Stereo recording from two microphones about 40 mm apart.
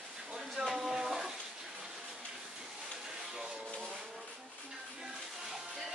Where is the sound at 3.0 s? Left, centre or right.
Centre.